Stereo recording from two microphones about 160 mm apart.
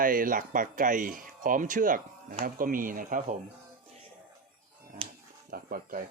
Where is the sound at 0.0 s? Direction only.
60° right (ahead or behind).